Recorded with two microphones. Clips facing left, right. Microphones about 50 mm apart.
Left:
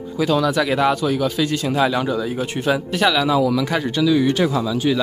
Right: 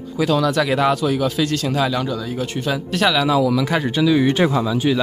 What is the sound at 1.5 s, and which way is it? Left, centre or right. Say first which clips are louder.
Speech: left 1 dB; centre.